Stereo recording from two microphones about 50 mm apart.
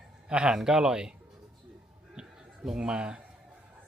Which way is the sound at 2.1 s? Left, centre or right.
Centre.